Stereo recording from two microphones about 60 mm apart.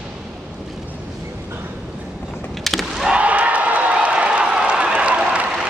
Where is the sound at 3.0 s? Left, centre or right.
Centre.